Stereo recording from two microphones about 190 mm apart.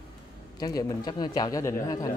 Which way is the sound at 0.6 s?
20° left (ahead or behind).